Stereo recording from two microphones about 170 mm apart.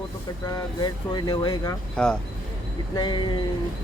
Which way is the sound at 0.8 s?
25° left (ahead or behind).